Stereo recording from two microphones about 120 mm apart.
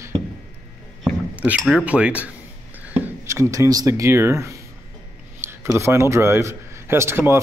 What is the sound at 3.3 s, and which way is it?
A man's voice, 25° right (ahead or behind).